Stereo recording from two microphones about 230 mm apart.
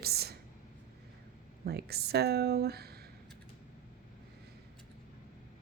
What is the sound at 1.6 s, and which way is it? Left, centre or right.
A woman's voice, right.